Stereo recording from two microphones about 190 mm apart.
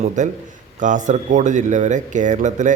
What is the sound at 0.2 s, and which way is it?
Speech, 40° right (ahead or behind).